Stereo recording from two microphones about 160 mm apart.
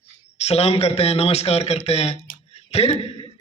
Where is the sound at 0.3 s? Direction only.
40° left (ahead or behind).